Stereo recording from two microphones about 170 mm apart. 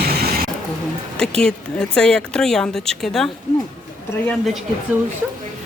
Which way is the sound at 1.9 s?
5° left (ahead or behind).